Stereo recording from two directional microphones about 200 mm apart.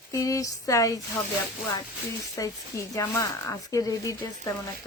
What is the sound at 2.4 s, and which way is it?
Speech, 15° left (ahead or behind).